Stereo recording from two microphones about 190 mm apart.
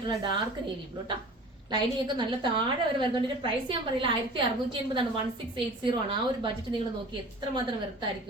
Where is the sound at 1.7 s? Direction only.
25° right (ahead or behind).